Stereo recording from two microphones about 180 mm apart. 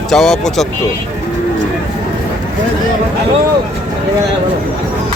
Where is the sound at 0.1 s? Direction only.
Centre (ahead or behind).